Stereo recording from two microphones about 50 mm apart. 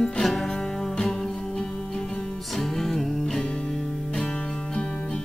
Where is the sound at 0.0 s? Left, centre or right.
Centre.